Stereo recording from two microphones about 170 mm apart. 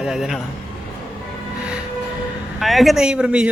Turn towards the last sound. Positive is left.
turn(degrees=-5)  # may be behind; listen again after turning